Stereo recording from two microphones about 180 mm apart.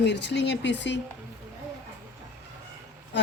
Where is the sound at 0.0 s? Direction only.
70° left (ahead or behind).